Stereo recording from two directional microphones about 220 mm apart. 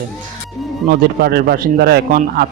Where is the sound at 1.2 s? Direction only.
45° right (ahead or behind).